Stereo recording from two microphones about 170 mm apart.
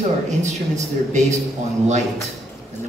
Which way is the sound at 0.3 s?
45° right (ahead or behind).